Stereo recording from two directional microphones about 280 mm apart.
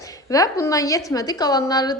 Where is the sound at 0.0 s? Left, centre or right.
Centre.